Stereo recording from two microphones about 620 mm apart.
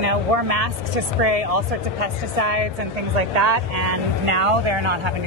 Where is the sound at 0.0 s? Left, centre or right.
Right.